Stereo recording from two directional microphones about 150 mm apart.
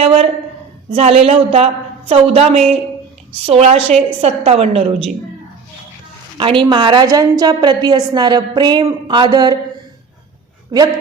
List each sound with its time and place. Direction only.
0.0 s a woman's voice: 40° right (ahead or behind)
6.3 s a woman's voice: 35° right (ahead or behind)
10.7 s a woman's voice: 25° right (ahead or behind)